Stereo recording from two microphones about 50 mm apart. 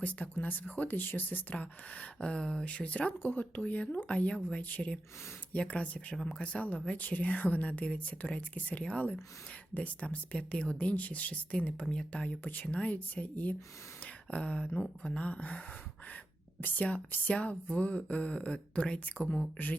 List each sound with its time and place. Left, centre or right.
0.0 s speech: left
14.0 s a sound: left
14.8 s speech: centre; by 19.7 s left